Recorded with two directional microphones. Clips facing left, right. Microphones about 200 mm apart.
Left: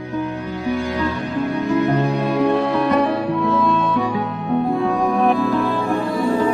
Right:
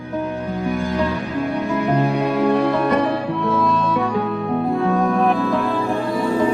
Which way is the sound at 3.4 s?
Centre (ahead or behind).